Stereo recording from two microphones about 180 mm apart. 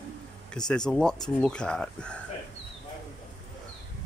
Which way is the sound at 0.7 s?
5° left (ahead or behind).